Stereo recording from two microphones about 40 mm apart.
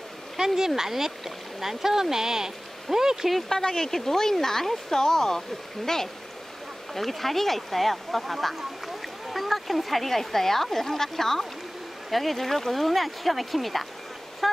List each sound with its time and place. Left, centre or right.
0.6 s speech: centre
3.3 s speech: centre
6.9 s speech: centre